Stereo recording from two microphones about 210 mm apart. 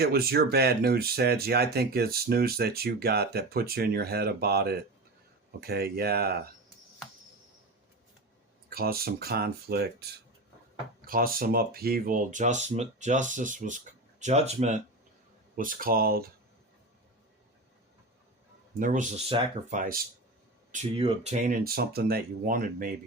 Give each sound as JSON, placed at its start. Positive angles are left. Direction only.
{"t": 0.0, "sound": "speech", "side_deg": -50}
{"t": 8.7, "sound": "speech", "side_deg": -45}
{"t": 18.8, "sound": "speech", "side_deg": -40}
{"t": 20.7, "sound": "speech", "side_deg": -25}